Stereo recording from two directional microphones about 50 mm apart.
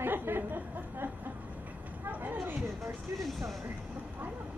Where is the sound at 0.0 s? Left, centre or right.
Right.